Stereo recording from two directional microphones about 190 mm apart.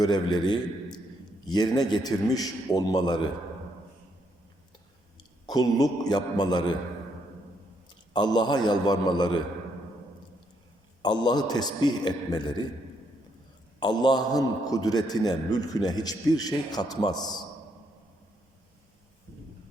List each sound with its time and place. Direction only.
0.0 s a man's voice: 20° left (ahead or behind)
5.5 s a man's voice: 20° left (ahead or behind)
7.9 s a man's voice: 25° left (ahead or behind)
11.0 s a man's voice: 20° left (ahead or behind)
13.7 s a man's voice: 20° left (ahead or behind)